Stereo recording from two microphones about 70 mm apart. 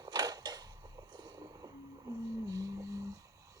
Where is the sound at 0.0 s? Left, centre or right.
Right.